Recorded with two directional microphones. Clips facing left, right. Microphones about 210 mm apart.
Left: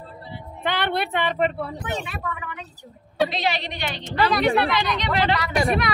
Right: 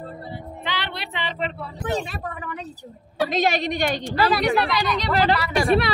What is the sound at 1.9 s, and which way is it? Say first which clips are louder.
A woman's voice: right 3 dB; 35° right (ahead or behind).